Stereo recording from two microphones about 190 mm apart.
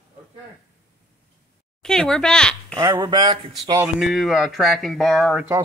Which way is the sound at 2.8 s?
15° right (ahead or behind).